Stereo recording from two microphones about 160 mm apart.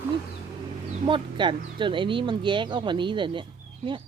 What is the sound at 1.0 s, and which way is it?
Speech, 30° right (ahead or behind).